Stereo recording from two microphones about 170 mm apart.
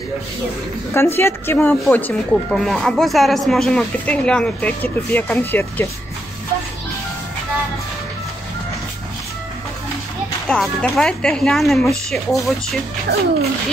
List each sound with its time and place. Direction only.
0.9 s speech: 15° left (ahead or behind)
10.5 s speech: 5° left (ahead or behind)
13.1 s speech: 75° right (ahead or behind)